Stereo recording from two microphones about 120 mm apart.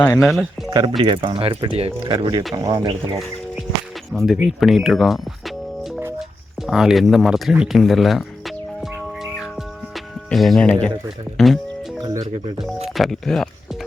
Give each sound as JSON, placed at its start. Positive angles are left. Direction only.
{"t": 0.2, "sound": "speech", "side_deg": 0}
{"t": 0.7, "sound": "speech", "side_deg": -35}
{"t": 2.0, "sound": "speech", "side_deg": -40}
{"t": 4.1, "sound": "speech", "side_deg": 0}
{"t": 9.1, "sound": "music", "side_deg": -5}
{"t": 10.2, "sound": "speech", "side_deg": 0}
{"t": 11.3, "sound": "music", "side_deg": 0}
{"t": 12.0, "sound": "speech", "side_deg": -35}
{"t": 12.9, "sound": "speech", "side_deg": 0}